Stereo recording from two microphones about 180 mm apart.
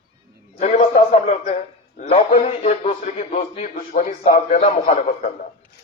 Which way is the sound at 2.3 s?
40° left (ahead or behind).